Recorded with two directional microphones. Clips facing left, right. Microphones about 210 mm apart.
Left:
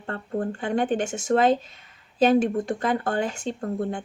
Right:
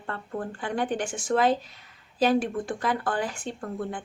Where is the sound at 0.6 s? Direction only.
25° left (ahead or behind).